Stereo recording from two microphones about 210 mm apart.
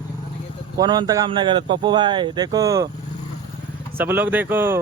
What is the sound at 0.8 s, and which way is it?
Speech, 20° right (ahead or behind).